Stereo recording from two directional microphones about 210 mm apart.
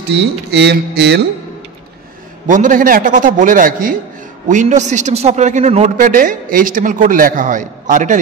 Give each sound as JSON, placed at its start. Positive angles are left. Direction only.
{"t": 0.1, "sound": "speech", "side_deg": -55}
{"t": 2.4, "sound": "a man's voice", "side_deg": -40}